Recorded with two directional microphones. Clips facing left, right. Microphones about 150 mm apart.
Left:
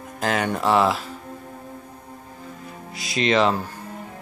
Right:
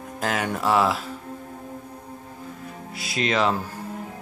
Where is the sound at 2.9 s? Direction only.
5° right (ahead or behind).